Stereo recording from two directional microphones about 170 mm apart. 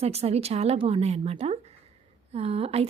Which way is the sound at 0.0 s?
40° right (ahead or behind).